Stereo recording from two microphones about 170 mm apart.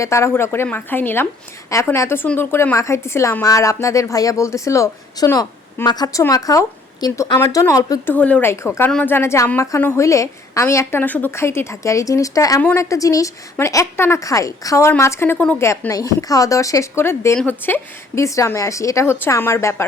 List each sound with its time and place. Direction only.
0.0 s a woman's voice: 15° left (ahead or behind)
8.1 s a woman's voice: 10° left (ahead or behind)